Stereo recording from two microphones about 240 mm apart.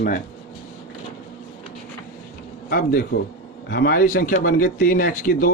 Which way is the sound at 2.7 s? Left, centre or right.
Left.